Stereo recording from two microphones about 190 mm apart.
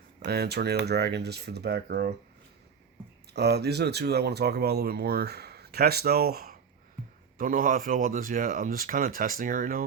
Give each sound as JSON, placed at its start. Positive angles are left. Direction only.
{"t": 0.3, "sound": "speech", "side_deg": -60}
{"t": 3.3, "sound": "speech", "side_deg": -60}